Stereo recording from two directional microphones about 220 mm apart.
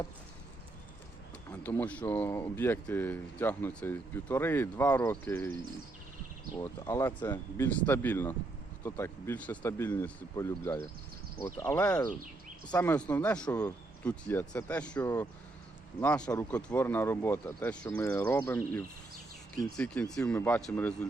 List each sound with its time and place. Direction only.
1.5 s speech: 10° left (ahead or behind)
6.6 s speech: 15° left (ahead or behind)